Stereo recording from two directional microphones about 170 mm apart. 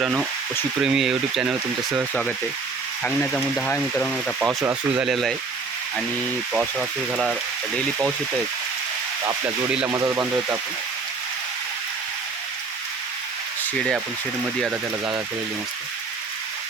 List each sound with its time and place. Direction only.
0.0 s speech: 5° right (ahead or behind)
3.0 s speech: 5° left (ahead or behind)
4.4 s speech: 10° right (ahead or behind)
6.5 s speech: 5° right (ahead or behind)
9.9 s speech: 15° right (ahead or behind)
14.6 s speech: 5° right (ahead or behind)